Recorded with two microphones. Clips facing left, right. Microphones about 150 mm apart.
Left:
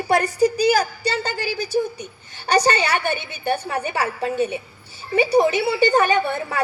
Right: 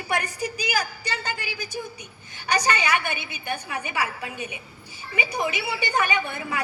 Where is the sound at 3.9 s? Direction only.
40° left (ahead or behind).